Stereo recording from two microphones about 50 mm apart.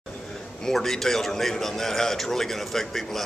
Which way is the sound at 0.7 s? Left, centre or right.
Centre.